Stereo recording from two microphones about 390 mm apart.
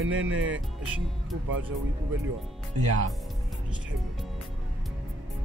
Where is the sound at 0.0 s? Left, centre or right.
Right.